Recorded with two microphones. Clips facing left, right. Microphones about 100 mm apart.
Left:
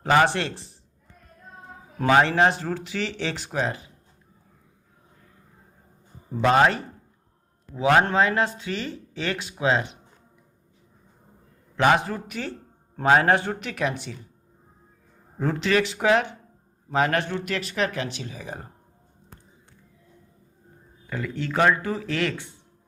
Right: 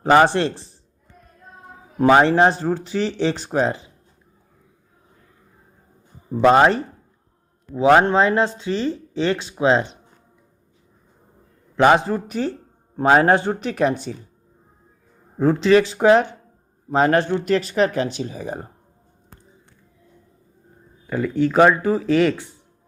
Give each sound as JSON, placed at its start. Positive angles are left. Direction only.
{"t": 0.0, "sound": "speech", "side_deg": -35}
{"t": 2.0, "sound": "speech", "side_deg": -25}
{"t": 6.5, "sound": "speech", "side_deg": -30}
{"t": 11.8, "sound": "speech", "side_deg": -30}
{"t": 15.4, "sound": "speech", "side_deg": -30}
{"t": 21.1, "sound": "speech", "side_deg": -20}